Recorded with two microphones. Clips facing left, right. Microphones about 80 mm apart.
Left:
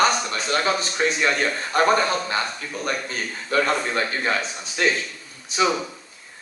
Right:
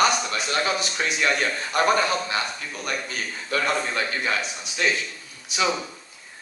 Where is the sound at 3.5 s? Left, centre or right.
Left.